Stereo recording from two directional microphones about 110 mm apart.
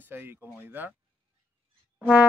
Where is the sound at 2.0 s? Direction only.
10° right (ahead or behind).